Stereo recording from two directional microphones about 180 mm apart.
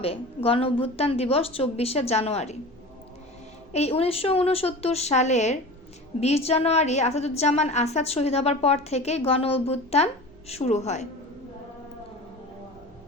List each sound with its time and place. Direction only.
0.0 s a woman's voice: 30° left (ahead or behind)
3.7 s a woman's voice: 35° left (ahead or behind)